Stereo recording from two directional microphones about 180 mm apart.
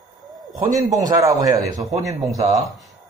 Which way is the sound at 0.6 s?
20° right (ahead or behind).